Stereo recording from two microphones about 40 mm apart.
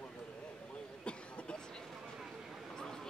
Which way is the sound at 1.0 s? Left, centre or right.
Left.